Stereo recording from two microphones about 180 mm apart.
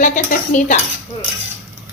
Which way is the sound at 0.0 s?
45° left (ahead or behind).